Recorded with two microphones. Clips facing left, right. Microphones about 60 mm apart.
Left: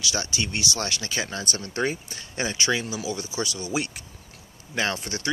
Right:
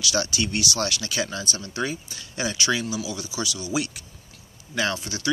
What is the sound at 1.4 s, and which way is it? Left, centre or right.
Speech, left.